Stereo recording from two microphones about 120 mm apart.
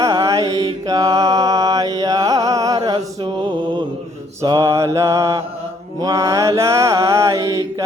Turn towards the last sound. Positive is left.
turn(degrees=-25)  # may be behind; listen again after turning